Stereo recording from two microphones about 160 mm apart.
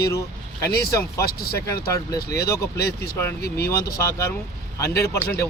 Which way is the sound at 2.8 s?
75° left (ahead or behind).